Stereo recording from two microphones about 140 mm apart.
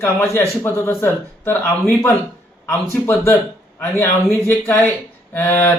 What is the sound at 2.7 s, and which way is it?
A man's voice, 20° left (ahead or behind).